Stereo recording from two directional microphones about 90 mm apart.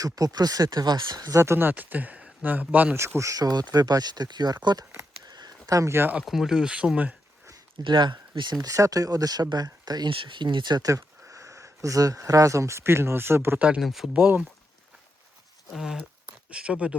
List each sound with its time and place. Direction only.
0.0 s speech: 45° right (ahead or behind)
1.3 s speech: 30° right (ahead or behind)
2.9 s speech: 30° right (ahead or behind); by 4.9 s 50° right (ahead or behind)
5.2 s a sound: 50° right (ahead or behind)
5.6 s speech: 35° right (ahead or behind)
6.2 s speech: 5° right (ahead or behind)
7.4 s a sound: 40° right (ahead or behind)
7.9 s speech: 55° right (ahead or behind)
8.6 s speech: 40° right (ahead or behind)
10.1 s speech: 65° right (ahead or behind)
10.8 s speech: 35° right (ahead or behind)
13.6 s speech: 10° right (ahead or behind)
14.1 s speech: 20° right (ahead or behind)
15.7 s speech: 5° right (ahead or behind)